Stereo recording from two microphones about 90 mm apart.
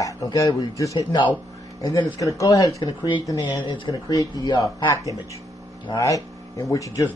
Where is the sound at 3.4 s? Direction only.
65° left (ahead or behind).